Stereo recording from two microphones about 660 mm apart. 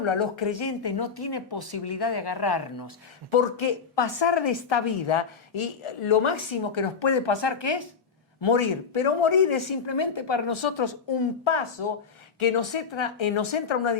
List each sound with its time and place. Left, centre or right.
0.0 s a woman's voice: left